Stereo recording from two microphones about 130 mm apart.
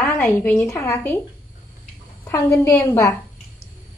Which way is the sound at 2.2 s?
20° left (ahead or behind).